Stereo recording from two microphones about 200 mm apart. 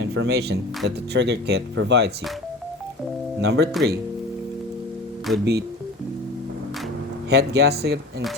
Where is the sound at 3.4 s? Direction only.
55° right (ahead or behind).